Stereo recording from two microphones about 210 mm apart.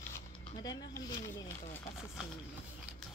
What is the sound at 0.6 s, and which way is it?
Speech, 15° left (ahead or behind).